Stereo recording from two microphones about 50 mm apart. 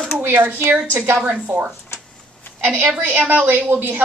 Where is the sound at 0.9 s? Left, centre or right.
Right.